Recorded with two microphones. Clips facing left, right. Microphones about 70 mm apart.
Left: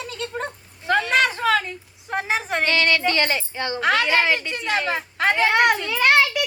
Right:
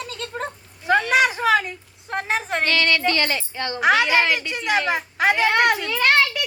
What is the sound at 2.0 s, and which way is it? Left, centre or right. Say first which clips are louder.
Speech: even; centre.